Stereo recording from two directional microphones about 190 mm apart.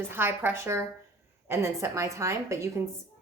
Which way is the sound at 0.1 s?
10° right (ahead or behind).